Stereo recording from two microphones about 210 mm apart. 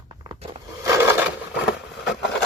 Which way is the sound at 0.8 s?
15° right (ahead or behind).